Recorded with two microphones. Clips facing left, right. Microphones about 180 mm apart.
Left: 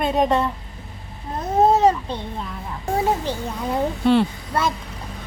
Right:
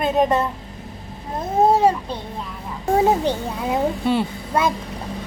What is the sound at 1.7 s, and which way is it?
Babbling, 10° right (ahead or behind).